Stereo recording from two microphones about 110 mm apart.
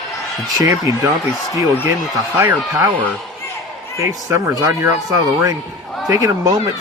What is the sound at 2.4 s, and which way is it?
Speech, 25° right (ahead or behind).